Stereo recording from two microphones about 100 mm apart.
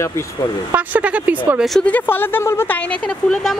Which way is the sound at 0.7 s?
15° right (ahead or behind).